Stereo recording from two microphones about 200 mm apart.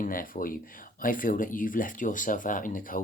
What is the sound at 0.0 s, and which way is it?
Speech, 45° left (ahead or behind).